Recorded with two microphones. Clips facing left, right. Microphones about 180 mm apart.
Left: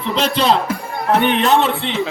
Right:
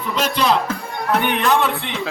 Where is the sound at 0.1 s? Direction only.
30° left (ahead or behind).